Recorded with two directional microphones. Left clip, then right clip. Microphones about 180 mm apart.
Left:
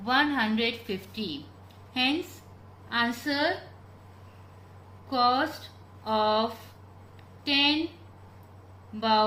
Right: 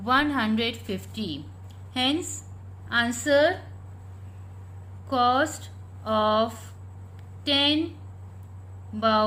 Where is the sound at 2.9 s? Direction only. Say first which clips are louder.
Right 3 dB; 45° right (ahead or behind).